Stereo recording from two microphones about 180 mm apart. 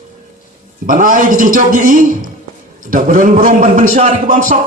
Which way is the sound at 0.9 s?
50° right (ahead or behind).